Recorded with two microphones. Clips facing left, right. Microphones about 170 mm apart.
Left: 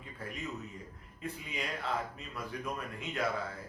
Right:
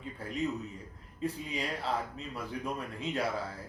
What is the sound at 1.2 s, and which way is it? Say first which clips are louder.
Speech: right 5 dB; 30° right (ahead or behind).